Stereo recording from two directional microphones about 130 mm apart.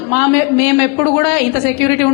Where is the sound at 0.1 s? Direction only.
15° left (ahead or behind).